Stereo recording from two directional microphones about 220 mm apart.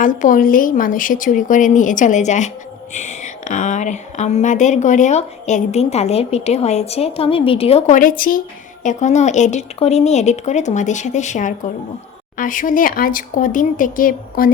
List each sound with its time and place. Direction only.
0.0 s a woman's voice: 35° left (ahead or behind)